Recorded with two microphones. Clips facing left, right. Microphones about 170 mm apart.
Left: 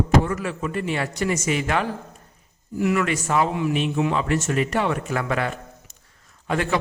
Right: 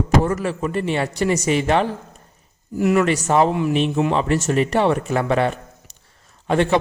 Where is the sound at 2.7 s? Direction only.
40° right (ahead or behind).